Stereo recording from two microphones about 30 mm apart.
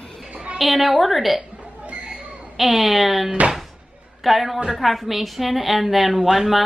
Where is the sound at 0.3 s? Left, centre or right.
Right.